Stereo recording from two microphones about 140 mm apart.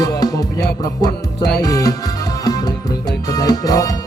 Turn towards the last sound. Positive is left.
turn(degrees=25)  # may be behind; listen again after turning